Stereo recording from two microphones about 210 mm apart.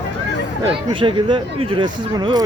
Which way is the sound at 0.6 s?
25° right (ahead or behind).